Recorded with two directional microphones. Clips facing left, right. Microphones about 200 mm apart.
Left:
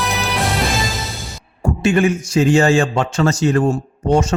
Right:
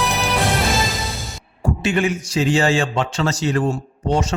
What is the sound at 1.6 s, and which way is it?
A man's voice, 45° left (ahead or behind).